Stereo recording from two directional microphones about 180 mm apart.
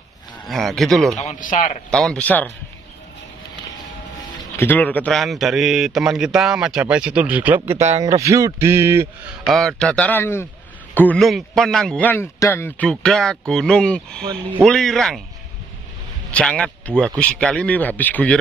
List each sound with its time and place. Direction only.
0.5 s a man's voice: centre (ahead or behind)
1.1 s a man's voice: 40° left (ahead or behind)
1.9 s a man's voice: 5° left (ahead or behind)
4.6 s a man's voice: 10° left (ahead or behind); by 9.1 s 15° right (ahead or behind)
9.5 s a man's voice: centre (ahead or behind)
14.2 s speech: 30° right (ahead or behind)
14.6 s a man's voice: 5° left (ahead or behind)
16.3 s speech: 5° left (ahead or behind)